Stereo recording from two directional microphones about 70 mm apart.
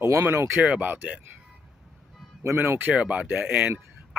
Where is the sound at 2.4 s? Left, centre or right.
Right.